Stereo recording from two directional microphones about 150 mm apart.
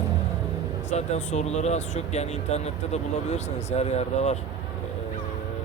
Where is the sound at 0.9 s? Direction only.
50° left (ahead or behind).